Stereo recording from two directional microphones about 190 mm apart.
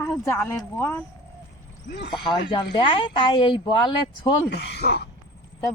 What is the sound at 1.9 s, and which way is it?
Speech, 60° left (ahead or behind).